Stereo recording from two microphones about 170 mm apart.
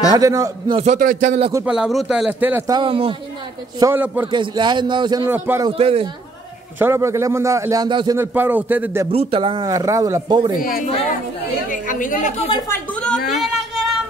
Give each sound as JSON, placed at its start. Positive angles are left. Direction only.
{"t": 0.1, "sound": "speech", "side_deg": -20}
{"t": 0.9, "sound": "speech", "side_deg": -50}
{"t": 1.7, "sound": "a man's voice", "side_deg": 0}
{"t": 2.7, "sound": "speech", "side_deg": -30}
{"t": 3.8, "sound": "a man's voice", "side_deg": -10}
{"t": 4.3, "sound": "speech", "side_deg": -25}
{"t": 5.3, "sound": "a man's voice", "side_deg": -15}
{"t": 5.7, "sound": "a man's voice", "side_deg": -35}
{"t": 6.8, "sound": "a man's voice", "side_deg": -15}
{"t": 8.2, "sound": "a man's voice", "side_deg": -10}
{"t": 9.1, "sound": "speech", "side_deg": -35}
{"t": 10.6, "sound": "a woman's voice", "side_deg": 55}
{"t": 12.5, "sound": "a woman's voice", "side_deg": 15}
{"t": 13.3, "sound": "a sound", "side_deg": 0}